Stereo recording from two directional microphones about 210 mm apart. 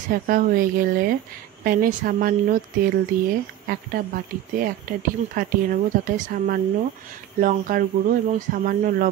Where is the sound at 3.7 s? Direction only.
45° right (ahead or behind).